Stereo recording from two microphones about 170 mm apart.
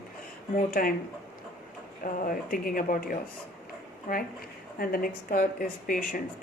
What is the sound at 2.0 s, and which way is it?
Speech, 55° left (ahead or behind).